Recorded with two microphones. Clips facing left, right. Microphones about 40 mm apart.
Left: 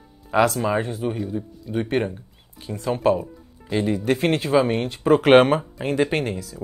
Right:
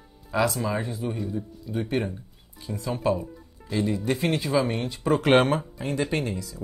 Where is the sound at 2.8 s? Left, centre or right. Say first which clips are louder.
Left 6 dB; left.